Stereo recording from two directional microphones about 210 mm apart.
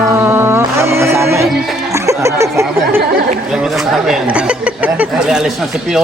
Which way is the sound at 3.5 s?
Centre (ahead or behind).